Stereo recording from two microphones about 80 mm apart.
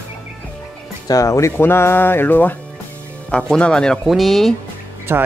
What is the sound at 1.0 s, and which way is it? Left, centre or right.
Speech, left.